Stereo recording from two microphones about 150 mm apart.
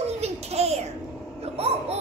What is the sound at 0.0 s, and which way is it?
Child singing, 45° right (ahead or behind).